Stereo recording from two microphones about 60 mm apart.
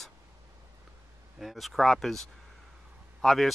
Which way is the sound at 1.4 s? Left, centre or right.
Centre.